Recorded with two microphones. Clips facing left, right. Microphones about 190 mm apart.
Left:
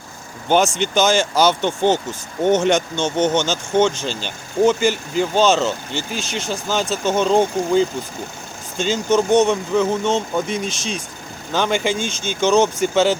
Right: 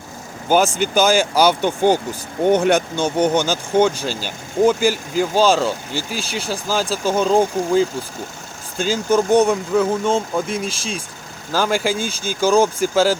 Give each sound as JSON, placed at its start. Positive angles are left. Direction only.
{"t": 0.4, "sound": "speech", "side_deg": -5}